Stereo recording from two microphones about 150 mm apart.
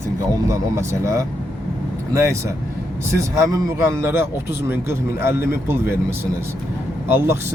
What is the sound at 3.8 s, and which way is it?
Speech, 15° right (ahead or behind).